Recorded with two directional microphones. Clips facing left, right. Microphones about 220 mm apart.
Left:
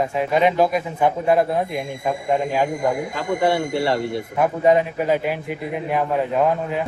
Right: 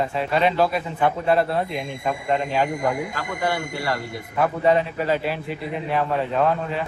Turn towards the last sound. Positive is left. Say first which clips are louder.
# left 2 dB
turn(degrees=15)  # may be behind; listen again after turning